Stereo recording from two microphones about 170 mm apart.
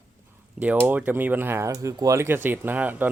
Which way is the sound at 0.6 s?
10° right (ahead or behind).